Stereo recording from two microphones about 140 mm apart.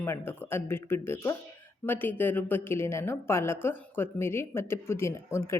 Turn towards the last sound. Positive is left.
turn(degrees=20)  # may be behind; listen again after turning